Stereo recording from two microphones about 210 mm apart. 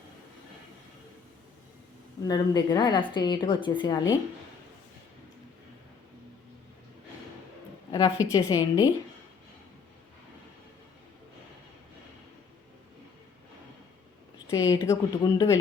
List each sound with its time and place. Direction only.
2.2 s a woman's voice: 20° left (ahead or behind)
7.9 s a woman's voice: 15° left (ahead or behind)
14.5 s a woman's voice: 15° left (ahead or behind)